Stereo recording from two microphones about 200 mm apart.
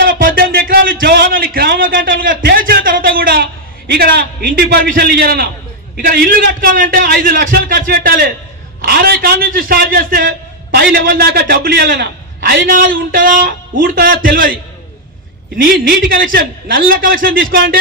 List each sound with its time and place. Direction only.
0.0 s a sound: 45° right (ahead or behind)
4.9 s a man's voice: 50° right (ahead or behind)
15.8 s a man's voice: 45° right (ahead or behind)